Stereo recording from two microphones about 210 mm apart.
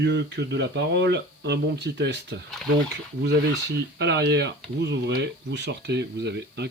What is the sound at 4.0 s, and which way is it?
Speech, 55° right (ahead or behind).